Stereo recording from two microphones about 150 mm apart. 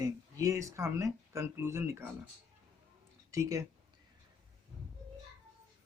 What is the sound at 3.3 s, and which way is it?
Speech, 20° right (ahead or behind).